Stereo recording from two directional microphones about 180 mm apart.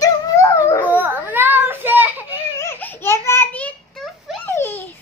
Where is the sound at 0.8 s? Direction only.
10° right (ahead or behind).